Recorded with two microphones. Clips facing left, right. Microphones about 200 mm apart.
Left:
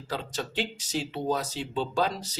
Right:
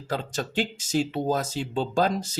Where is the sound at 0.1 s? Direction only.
45° right (ahead or behind).